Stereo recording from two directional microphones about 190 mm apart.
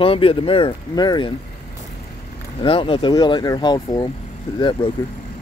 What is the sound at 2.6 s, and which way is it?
Speech, 25° left (ahead or behind).